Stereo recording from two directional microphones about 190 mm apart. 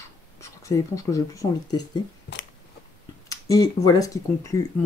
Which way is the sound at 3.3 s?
20° left (ahead or behind).